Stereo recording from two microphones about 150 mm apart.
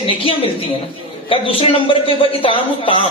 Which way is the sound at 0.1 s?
35° left (ahead or behind).